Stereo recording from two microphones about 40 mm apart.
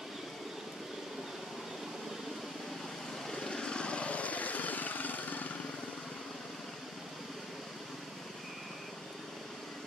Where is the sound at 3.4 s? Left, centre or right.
Centre; by 5.6 s left.